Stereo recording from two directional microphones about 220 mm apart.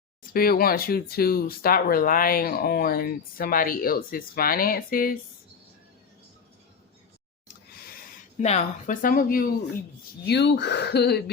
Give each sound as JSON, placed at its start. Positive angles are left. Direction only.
{"t": 0.2, "sound": "speech", "side_deg": 40}
{"t": 8.4, "sound": "speech", "side_deg": 30}